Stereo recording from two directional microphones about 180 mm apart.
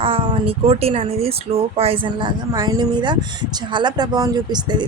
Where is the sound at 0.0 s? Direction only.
30° right (ahead or behind).